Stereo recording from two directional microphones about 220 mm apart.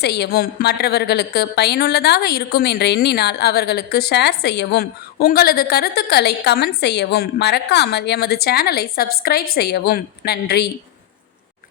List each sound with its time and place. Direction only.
0.0 s a woman's voice: 50° left (ahead or behind)